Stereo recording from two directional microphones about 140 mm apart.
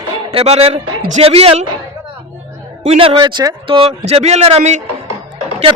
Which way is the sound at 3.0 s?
40° right (ahead or behind).